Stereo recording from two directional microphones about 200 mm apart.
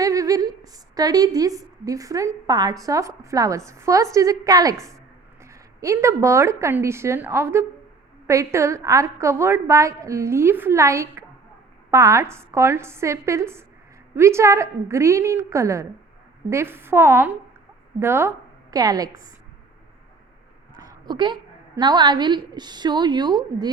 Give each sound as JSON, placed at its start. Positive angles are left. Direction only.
{"t": 0.0, "sound": "a woman's voice", "side_deg": -15}
{"t": 20.7, "sound": "a sound", "side_deg": -20}
{"t": 21.8, "sound": "a woman's voice", "side_deg": -20}